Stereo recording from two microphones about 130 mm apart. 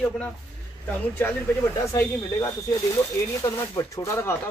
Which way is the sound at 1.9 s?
20° left (ahead or behind).